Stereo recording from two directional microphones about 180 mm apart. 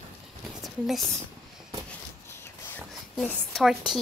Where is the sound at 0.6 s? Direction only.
Centre (ahead or behind).